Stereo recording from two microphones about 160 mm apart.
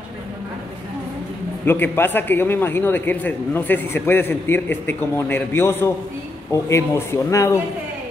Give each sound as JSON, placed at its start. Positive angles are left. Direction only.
{"t": 1.7, "sound": "a man's voice", "side_deg": 15}